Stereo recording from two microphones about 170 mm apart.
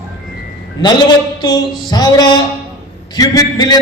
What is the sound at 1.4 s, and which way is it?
A man's voice, 25° left (ahead or behind).